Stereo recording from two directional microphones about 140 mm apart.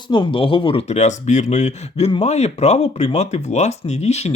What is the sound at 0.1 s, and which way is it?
Speech, 35° left (ahead or behind).